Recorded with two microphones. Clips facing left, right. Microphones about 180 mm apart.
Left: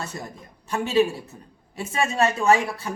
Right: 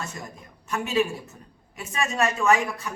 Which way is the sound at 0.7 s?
30° left (ahead or behind).